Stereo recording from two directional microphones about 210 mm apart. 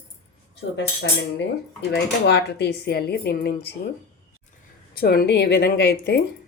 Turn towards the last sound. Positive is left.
turn(degrees=50)  # may be behind; listen again after turning